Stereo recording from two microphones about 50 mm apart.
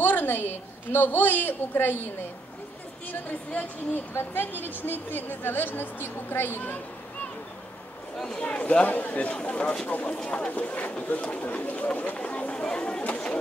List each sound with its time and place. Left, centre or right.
0.0 s a woman's voice: left
3.1 s a woman's voice: left
4.1 s a woman's voice: left
8.4 s a woman's voice: left
10.1 s speech: centre
10.5 s speech: left